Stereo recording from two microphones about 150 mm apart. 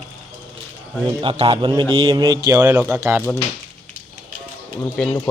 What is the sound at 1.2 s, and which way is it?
A man's voice, 35° right (ahead or behind).